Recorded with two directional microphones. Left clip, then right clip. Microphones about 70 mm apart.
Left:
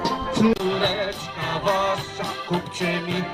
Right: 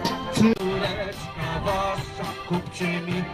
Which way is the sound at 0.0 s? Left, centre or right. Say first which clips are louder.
Left 2 dB; right.